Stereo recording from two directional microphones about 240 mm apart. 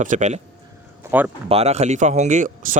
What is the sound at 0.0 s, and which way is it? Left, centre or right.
Speech, right.